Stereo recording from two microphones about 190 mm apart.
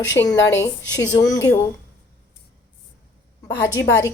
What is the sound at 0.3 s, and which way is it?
Speech, 70° left (ahead or behind).